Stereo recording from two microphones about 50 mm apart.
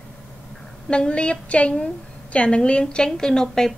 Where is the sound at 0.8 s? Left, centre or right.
Centre.